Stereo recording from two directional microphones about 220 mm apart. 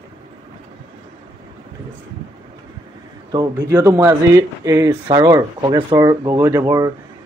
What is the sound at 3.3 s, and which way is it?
Speech, 10° right (ahead or behind).